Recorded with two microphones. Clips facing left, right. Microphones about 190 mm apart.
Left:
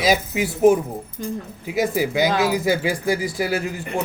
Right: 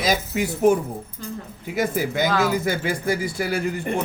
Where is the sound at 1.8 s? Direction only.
5° left (ahead or behind).